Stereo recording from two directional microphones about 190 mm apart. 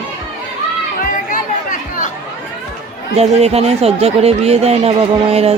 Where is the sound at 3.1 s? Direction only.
35° right (ahead or behind).